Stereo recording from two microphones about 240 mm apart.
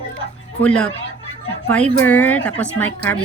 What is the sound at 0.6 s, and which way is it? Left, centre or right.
Speech, centre.